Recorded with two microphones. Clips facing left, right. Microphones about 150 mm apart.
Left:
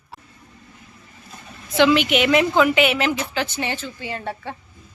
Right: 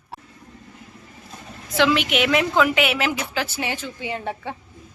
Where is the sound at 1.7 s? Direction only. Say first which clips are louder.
Left 3 dB; centre (ahead or behind).